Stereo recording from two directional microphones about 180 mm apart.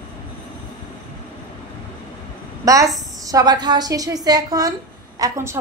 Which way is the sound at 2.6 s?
20° right (ahead or behind).